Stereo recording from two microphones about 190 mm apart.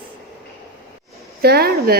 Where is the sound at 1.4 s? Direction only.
55° right (ahead or behind).